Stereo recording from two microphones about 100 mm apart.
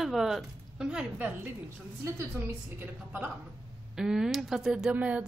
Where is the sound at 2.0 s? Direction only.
25° right (ahead or behind).